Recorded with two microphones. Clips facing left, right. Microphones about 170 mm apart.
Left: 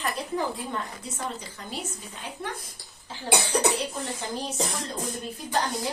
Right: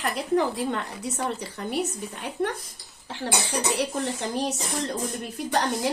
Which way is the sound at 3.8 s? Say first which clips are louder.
Right 5 dB; 70° right (ahead or behind).